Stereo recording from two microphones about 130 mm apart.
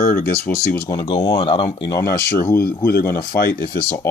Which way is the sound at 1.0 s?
35° left (ahead or behind).